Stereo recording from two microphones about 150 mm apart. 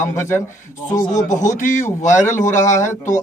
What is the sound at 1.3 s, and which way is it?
A man's voice, 55° left (ahead or behind).